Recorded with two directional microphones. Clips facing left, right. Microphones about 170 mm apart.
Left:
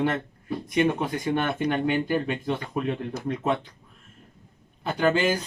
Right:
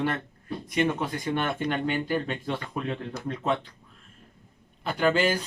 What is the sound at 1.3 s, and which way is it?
Speech, 15° left (ahead or behind).